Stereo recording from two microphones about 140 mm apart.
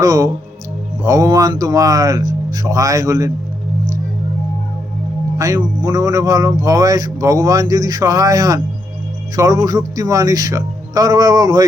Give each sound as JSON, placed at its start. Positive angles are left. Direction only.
{"t": 0.0, "sound": "speech", "side_deg": -25}
{"t": 5.4, "sound": "speech", "side_deg": -25}